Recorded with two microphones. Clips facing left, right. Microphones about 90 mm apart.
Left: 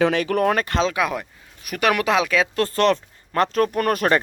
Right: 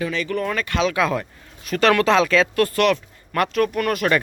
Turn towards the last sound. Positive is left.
turn(degrees=40)  # may be behind; listen again after turning